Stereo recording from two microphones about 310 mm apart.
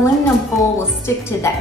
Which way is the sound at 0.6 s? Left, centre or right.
Centre.